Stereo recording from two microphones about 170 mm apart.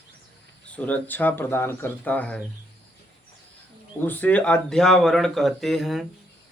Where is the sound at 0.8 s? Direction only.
10° left (ahead or behind).